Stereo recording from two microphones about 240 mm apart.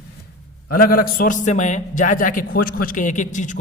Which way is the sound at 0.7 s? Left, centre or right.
Left.